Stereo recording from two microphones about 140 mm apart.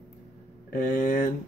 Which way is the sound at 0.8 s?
70° left (ahead or behind).